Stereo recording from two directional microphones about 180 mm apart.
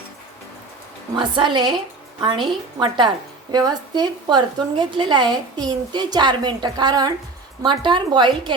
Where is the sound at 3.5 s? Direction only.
20° right (ahead or behind).